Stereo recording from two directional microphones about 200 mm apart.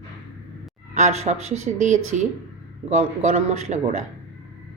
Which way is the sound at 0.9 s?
35° right (ahead or behind).